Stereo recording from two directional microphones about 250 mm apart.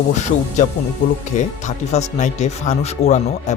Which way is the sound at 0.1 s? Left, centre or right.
Left.